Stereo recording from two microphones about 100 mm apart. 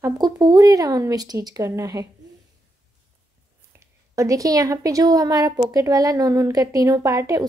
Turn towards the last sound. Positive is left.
turn(degrees=-35)  # may be behind; listen again after turning